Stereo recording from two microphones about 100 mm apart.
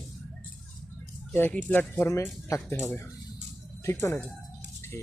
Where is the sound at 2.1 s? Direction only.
30° left (ahead or behind).